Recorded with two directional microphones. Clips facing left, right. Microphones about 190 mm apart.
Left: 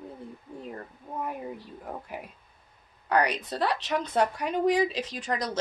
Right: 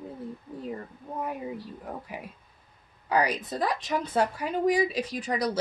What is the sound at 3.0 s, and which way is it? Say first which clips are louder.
Speech: even; 5° right (ahead or behind).